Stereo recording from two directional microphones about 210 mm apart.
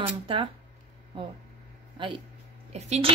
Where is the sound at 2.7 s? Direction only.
30° right (ahead or behind).